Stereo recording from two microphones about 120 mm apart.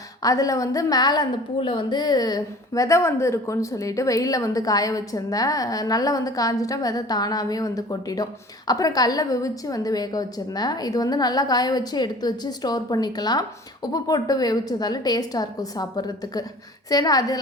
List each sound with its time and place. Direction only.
0.2 s a woman's voice: 30° left (ahead or behind)